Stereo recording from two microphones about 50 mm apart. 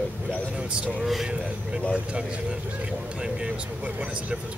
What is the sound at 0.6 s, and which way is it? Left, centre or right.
Speech, right.